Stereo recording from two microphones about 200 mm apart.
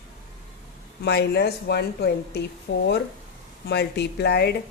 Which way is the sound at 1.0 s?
55° left (ahead or behind).